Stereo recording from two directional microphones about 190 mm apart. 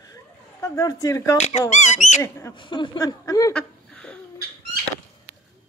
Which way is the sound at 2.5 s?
25° left (ahead or behind).